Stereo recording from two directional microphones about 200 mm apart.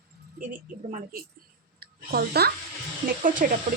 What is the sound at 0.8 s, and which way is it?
Speech, 40° right (ahead or behind).